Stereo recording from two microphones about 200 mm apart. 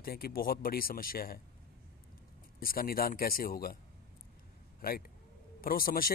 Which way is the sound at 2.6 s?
45° left (ahead or behind).